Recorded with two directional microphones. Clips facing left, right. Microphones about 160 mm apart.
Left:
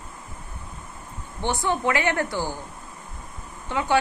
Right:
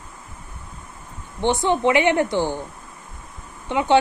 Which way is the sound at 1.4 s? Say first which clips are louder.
Right 5 dB; 20° right (ahead or behind).